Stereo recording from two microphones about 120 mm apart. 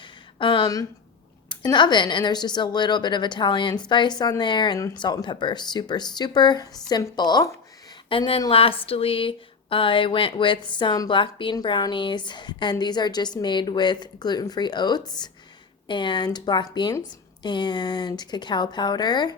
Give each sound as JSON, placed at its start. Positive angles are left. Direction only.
{"t": 0.0, "sound": "a sound", "side_deg": 45}
{"t": 1.5, "sound": "speech", "side_deg": 40}
{"t": 8.1, "sound": "speech", "side_deg": 45}